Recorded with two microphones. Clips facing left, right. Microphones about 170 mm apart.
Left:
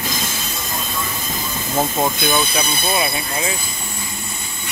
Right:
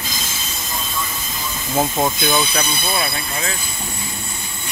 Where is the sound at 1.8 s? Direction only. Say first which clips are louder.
Right 1 dB; centre (ahead or behind).